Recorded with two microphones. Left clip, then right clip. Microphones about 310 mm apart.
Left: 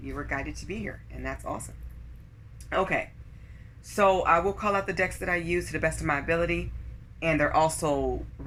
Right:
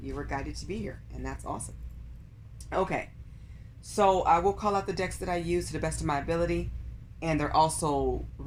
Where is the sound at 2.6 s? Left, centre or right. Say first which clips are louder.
Left 3 dB; right.